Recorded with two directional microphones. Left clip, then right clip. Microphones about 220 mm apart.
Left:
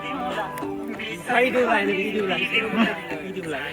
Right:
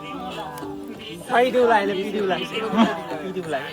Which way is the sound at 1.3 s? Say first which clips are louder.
Right 3 dB; 30° right (ahead or behind).